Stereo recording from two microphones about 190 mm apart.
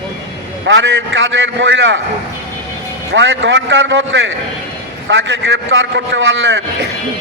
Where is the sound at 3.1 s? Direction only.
80° right.